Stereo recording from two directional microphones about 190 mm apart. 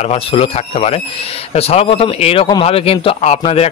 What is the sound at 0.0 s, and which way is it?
Speech, 35° left (ahead or behind).